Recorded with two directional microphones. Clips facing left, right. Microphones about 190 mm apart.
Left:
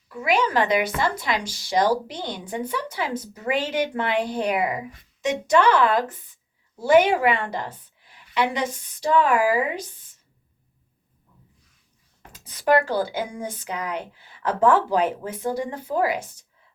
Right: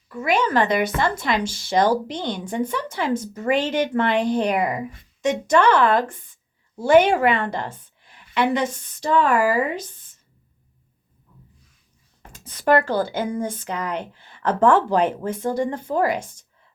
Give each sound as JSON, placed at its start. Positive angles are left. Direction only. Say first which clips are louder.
{"t": 0.1, "sound": "a woman's voice", "louder": "right 1 dB", "side_deg": 10}
{"t": 5.2, "sound": "speech", "louder": "right 2 dB", "side_deg": -50}
{"t": 5.5, "sound": "a woman's voice", "louder": "right 1 dB", "side_deg": 10}
{"t": 7.5, "sound": "a sound", "louder": "right 2 dB", "side_deg": 10}
{"t": 8.4, "sound": "a woman's voice", "louder": "right 3 dB", "side_deg": 10}
{"t": 12.3, "sound": "a woman's voice", "louder": "right 1 dB", "side_deg": 10}